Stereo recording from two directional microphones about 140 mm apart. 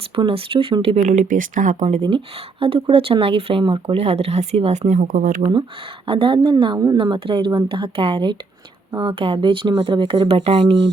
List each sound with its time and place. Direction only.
0.2 s speech: 40° right (ahead or behind); by 2.0 s 65° right (ahead or behind)
2.0 s speech: 40° right (ahead or behind)
4.9 s speech: 70° right (ahead or behind)
5.4 s speech: 45° right (ahead or behind)